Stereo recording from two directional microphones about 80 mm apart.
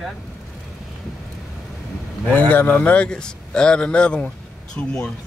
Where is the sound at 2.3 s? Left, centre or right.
Centre.